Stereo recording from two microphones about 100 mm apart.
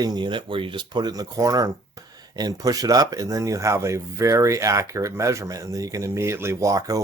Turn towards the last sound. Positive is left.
turn(degrees=-35)  # may be behind; listen again after turning